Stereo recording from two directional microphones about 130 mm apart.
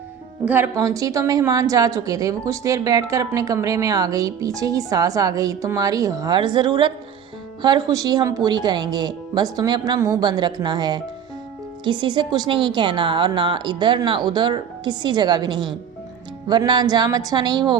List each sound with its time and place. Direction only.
0.4 s a woman's voice: 15° right (ahead or behind); by 17.7 s 35° right (ahead or behind)